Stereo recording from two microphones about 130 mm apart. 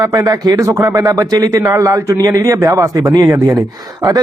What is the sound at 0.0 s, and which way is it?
A man's voice, 25° right (ahead or behind).